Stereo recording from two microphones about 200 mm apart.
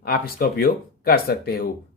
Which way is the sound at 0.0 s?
50° left (ahead or behind).